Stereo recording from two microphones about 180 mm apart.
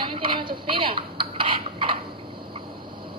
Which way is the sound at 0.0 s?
30° right (ahead or behind).